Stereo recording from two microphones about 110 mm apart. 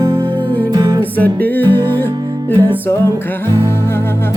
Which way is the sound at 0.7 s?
35° right (ahead or behind).